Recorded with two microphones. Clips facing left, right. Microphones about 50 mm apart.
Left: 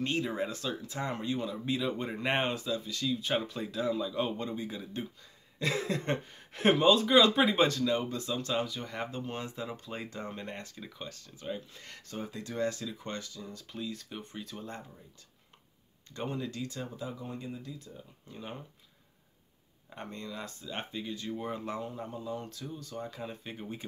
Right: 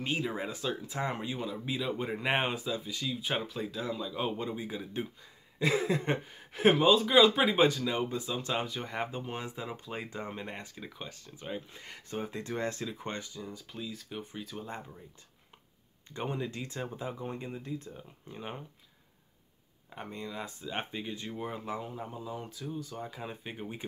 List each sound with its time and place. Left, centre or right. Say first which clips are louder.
0.0 s speech: left 1 dB; centre
12.2 s speech: left 1 dB; right; by 13.7 s centre
13.7 s speech: left 2 dB; centre
16.1 s speech: right 1 dB; centre
19.9 s speech: right 1 dB; centre; by 21.4 s right
21.4 s speech: right 1 dB; centre